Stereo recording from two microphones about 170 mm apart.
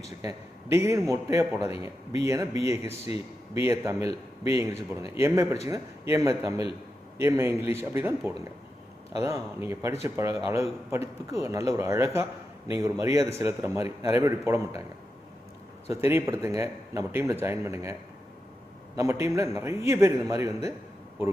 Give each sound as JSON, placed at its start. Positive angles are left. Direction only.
{"t": 0.2, "sound": "speech", "side_deg": -15}
{"t": 15.9, "sound": "speech", "side_deg": -15}
{"t": 18.9, "sound": "speech", "side_deg": -15}